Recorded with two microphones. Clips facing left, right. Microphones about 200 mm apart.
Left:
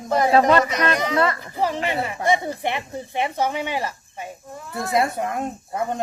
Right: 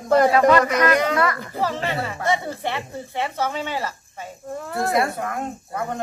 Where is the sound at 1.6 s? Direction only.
15° left (ahead or behind).